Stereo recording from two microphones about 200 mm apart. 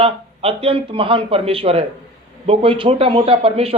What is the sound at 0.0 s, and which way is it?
Speech, 30° right (ahead or behind).